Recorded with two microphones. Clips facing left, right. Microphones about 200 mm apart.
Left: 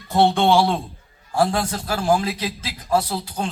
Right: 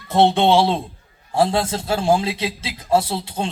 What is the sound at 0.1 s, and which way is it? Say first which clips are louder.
A man's voice: right 2 dB; 20° right (ahead or behind).